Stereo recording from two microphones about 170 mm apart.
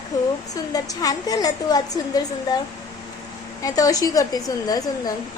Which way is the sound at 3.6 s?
20° left (ahead or behind).